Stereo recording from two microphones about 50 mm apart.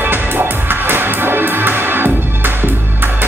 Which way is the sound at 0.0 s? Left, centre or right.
Right.